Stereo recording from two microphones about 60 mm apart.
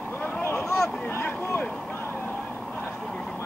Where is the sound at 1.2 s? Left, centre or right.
Left.